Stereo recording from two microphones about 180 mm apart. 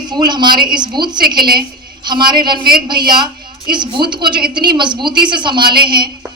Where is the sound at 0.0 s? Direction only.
25° right (ahead or behind).